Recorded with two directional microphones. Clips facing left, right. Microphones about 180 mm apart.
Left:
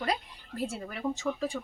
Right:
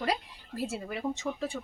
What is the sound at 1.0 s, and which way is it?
Speech, 20° right (ahead or behind).